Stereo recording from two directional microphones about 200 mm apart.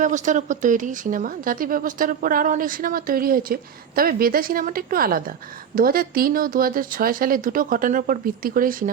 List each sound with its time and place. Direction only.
0.0 s speech: 40° right (ahead or behind)